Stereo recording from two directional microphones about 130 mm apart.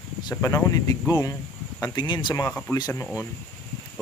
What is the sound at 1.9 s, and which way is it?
Speech, 35° left (ahead or behind).